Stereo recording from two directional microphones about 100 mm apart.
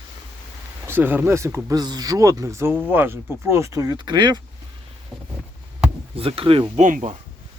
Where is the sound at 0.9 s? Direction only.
20° right (ahead or behind).